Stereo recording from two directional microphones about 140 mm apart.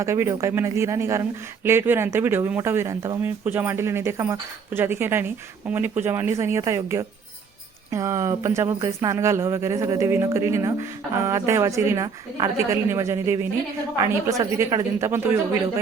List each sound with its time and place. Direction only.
0.0 s speech: 20° right (ahead or behind)